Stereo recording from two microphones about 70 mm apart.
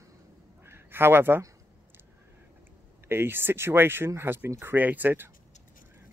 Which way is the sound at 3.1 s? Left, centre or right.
Right.